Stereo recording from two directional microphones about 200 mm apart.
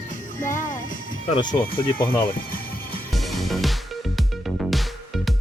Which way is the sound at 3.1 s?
Centre (ahead or behind).